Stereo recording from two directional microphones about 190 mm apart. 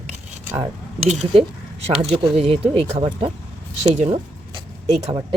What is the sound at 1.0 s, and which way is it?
Speech, 35° right (ahead or behind).